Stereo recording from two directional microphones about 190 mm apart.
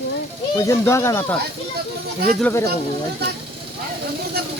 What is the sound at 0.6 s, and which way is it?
Speech, 15° left (ahead or behind).